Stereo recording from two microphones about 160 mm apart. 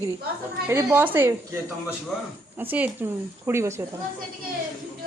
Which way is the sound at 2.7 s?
10° right (ahead or behind).